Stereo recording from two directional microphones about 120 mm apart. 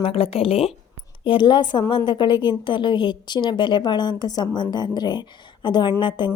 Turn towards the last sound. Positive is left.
turn(degrees=40)  # may be behind; listen again after turning